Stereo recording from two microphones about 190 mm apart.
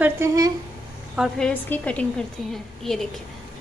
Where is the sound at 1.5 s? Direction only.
10° left (ahead or behind).